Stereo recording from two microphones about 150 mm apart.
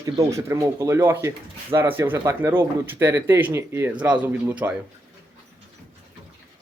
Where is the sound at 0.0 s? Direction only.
20° right (ahead or behind).